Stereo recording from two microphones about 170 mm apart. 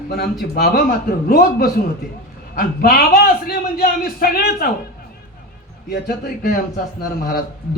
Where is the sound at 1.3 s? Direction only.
60° left (ahead or behind).